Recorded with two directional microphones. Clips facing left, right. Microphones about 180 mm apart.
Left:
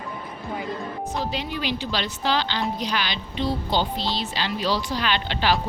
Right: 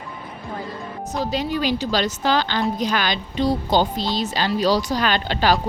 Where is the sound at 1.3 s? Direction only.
40° right (ahead or behind).